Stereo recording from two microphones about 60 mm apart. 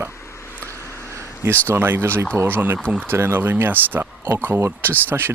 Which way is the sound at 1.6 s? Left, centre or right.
Right.